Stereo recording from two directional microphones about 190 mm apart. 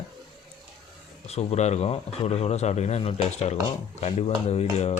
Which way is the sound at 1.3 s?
35° left (ahead or behind).